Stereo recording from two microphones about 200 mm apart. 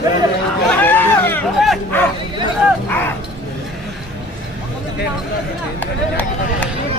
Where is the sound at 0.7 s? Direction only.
10° left (ahead or behind).